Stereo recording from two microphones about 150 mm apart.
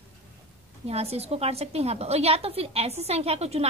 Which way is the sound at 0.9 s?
45° right (ahead or behind).